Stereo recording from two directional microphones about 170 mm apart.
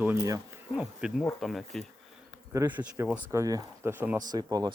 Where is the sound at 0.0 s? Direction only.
15° right (ahead or behind).